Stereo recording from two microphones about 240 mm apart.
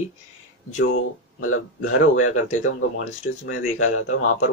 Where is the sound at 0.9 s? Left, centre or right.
Left.